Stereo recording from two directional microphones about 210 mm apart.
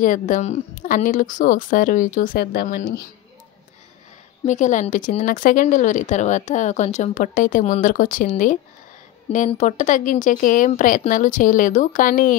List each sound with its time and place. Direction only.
0.0 s speech: 40° left (ahead or behind)
4.5 s speech: 35° left (ahead or behind)